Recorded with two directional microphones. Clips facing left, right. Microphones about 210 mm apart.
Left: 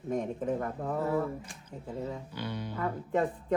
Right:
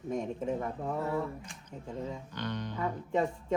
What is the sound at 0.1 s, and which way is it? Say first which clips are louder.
Speech: left 2 dB; centre (ahead or behind).